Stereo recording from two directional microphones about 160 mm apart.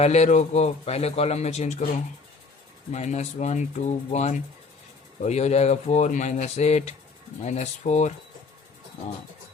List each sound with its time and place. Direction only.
0.0 s a man's voice: 45° left (ahead or behind)
2.9 s a man's voice: 45° left (ahead or behind)